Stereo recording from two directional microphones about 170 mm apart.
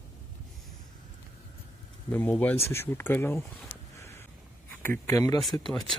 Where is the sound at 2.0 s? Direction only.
10° left (ahead or behind).